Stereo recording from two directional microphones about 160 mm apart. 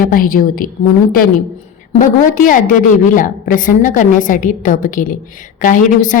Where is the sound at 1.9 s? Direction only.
55° left (ahead or behind).